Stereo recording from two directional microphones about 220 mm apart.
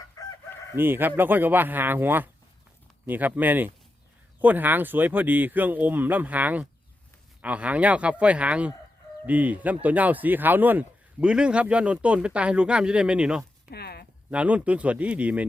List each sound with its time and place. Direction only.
0.2 s chicken: 15° left (ahead or behind)
0.8 s a man's voice: 10° right (ahead or behind)
13.7 s a sound: 45° left (ahead or behind)
14.3 s a man's voice: 5° right (ahead or behind)